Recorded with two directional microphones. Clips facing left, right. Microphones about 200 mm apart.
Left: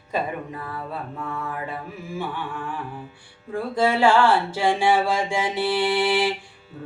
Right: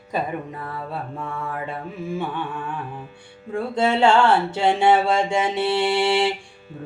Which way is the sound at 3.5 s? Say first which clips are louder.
Right 1 dB; 25° right (ahead or behind).